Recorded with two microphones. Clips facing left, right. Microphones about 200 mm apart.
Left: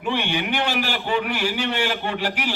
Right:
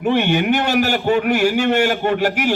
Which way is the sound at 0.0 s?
45° right (ahead or behind).